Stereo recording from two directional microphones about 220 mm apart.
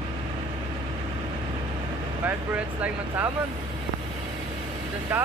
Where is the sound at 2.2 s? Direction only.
10° right (ahead or behind).